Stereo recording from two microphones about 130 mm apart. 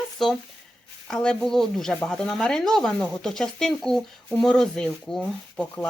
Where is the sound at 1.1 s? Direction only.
5° left (ahead or behind).